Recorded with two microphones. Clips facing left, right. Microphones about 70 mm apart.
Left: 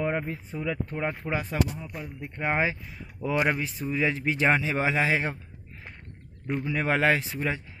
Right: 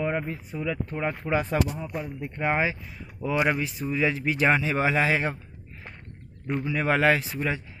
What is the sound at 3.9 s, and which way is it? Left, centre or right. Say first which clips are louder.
Speech: right 1 dB; left.